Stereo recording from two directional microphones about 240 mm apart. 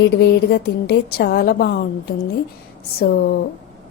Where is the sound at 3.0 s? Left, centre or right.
Left.